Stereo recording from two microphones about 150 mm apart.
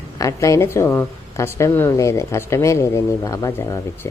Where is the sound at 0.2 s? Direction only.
20° left (ahead or behind).